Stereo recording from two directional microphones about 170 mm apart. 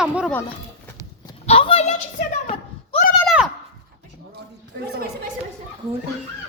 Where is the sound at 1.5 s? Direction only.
35° left (ahead or behind).